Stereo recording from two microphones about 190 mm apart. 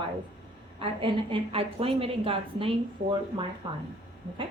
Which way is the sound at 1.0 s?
25° right (ahead or behind).